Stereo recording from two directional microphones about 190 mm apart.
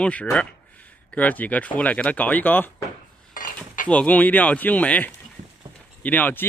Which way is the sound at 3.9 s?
5° left (ahead or behind).